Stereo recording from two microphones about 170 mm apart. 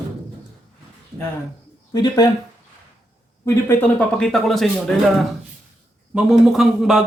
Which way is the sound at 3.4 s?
10° left (ahead or behind).